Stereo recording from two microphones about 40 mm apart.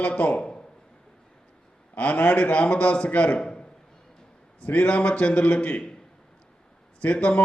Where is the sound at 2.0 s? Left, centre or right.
Left.